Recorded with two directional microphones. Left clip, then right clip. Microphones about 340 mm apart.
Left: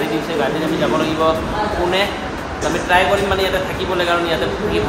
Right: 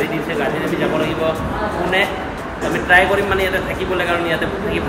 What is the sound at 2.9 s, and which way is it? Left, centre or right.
Speech, centre.